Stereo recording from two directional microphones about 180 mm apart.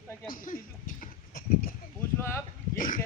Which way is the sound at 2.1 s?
15° left (ahead or behind).